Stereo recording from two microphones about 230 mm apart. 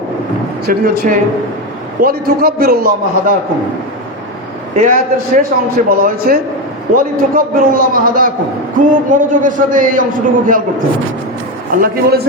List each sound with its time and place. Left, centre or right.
0.6 s a man's voice: right
4.7 s a man's voice: right
11.7 s a man's voice: right